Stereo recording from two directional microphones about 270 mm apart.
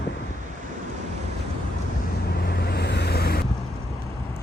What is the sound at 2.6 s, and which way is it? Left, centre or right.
Vehicle, left.